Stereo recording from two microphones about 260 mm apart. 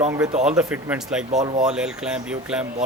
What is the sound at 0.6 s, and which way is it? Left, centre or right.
Speech, centre.